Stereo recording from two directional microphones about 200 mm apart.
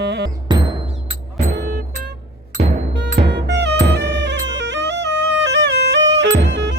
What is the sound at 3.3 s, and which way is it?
Music, 60° right (ahead or behind).